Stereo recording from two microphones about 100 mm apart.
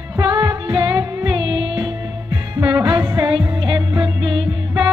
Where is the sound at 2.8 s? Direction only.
40° right (ahead or behind).